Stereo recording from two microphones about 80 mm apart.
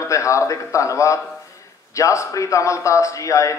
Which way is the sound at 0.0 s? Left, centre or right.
Left.